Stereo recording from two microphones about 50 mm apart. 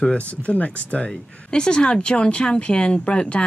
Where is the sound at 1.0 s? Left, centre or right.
Centre.